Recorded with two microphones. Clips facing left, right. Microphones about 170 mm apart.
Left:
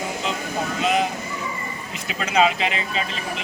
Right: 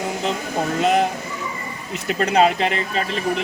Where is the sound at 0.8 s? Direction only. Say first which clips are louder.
Right 4 dB; 55° right (ahead or behind).